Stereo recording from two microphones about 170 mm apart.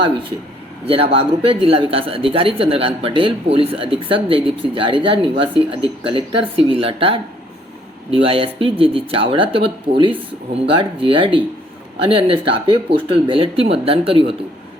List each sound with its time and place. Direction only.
0.0 s speech: 30° right (ahead or behind)
1.5 s speech: 35° right (ahead or behind)